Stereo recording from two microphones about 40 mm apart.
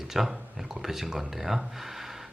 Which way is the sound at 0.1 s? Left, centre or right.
Centre.